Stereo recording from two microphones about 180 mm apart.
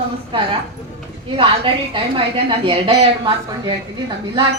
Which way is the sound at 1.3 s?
30° right (ahead or behind).